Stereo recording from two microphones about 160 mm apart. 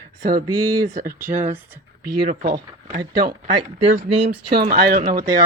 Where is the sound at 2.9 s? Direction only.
65° right (ahead or behind).